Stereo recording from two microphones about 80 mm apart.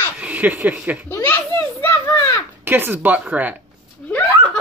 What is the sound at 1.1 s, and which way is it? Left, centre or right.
Children playing, left.